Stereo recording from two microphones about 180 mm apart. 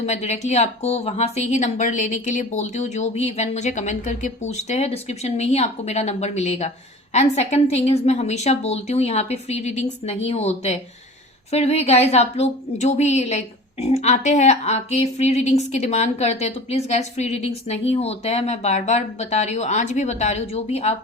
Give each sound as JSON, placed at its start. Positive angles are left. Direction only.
{"t": 0.0, "sound": "a woman's voice", "side_deg": 40}